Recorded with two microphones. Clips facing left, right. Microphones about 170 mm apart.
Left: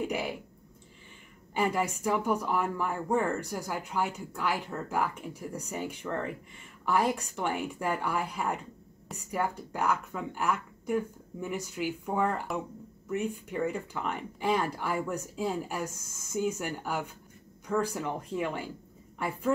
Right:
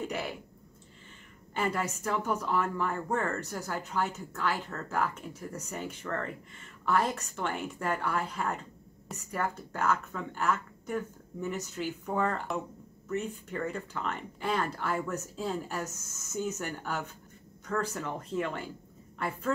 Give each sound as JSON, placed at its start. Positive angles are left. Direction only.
{"t": 0.0, "sound": "speech", "side_deg": 10}
{"t": 1.5, "sound": "a woman's voice", "side_deg": 10}